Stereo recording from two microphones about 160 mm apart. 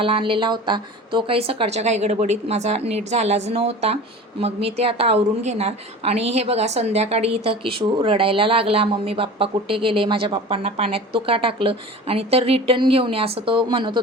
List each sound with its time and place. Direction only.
0.0 s a woman's voice: 35° right (ahead or behind)